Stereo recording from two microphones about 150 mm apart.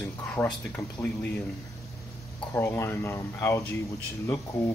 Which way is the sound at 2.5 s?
15° left (ahead or behind).